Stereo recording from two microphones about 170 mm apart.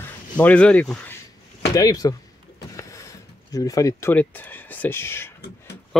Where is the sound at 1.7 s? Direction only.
20° left (ahead or behind).